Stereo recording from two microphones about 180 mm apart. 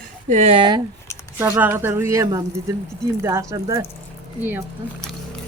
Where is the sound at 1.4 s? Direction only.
10° right (ahead or behind).